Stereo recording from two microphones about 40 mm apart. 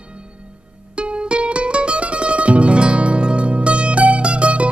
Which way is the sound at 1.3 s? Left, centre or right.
Right.